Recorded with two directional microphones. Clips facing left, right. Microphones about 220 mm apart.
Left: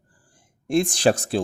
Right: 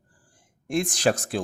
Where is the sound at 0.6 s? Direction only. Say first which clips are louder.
Left 4 dB; 30° left (ahead or behind).